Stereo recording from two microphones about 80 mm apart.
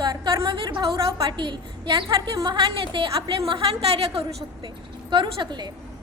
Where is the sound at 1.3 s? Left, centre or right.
Right.